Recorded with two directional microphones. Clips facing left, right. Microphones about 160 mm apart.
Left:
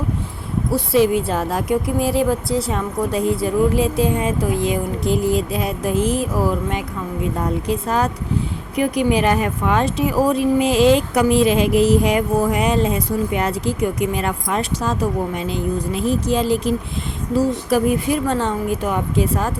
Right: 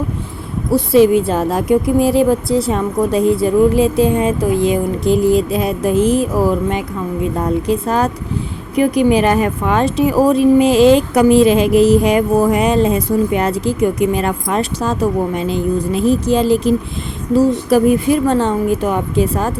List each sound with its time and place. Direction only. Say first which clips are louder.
0.9 s a woman's voice: right 6 dB; 25° right (ahead or behind)
7.3 s a woman's voice: right 6 dB; 35° right (ahead or behind)